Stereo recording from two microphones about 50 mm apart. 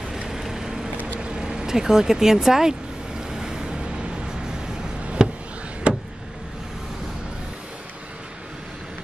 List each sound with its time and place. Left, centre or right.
0.3 s vehicle: centre
1.2 s speech: centre
3.3 s vehicle: centre
5.2 s a sound: centre
5.9 s vehicle: right